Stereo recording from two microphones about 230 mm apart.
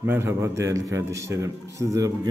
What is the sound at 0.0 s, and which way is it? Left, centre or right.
A man's voice, centre.